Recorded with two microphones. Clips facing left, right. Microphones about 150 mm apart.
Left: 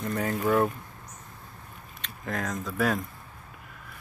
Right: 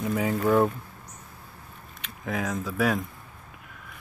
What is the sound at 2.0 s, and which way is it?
Speech, 5° right (ahead or behind).